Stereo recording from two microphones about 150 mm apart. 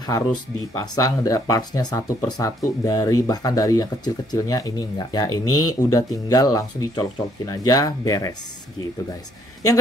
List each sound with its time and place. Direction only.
0.7 s speech: 25° left (ahead or behind)